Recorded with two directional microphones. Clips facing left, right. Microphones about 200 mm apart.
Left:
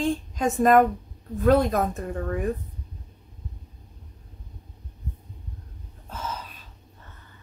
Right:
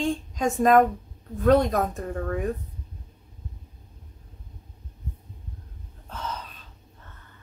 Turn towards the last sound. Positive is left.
turn(degrees=5)  # may be behind; listen again after turning